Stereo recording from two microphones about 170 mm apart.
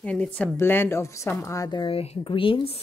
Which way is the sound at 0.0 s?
5° left (ahead or behind).